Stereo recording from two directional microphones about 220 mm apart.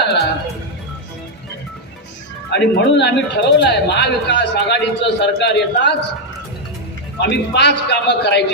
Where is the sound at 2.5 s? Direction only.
50° left (ahead or behind).